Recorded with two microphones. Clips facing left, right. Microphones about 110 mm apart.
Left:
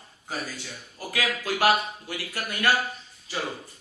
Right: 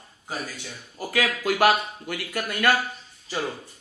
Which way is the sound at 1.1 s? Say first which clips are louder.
Right 4 dB; 45° right (ahead or behind).